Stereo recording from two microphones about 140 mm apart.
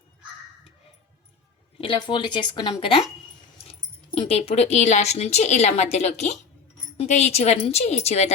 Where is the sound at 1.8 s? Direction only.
35° left (ahead or behind).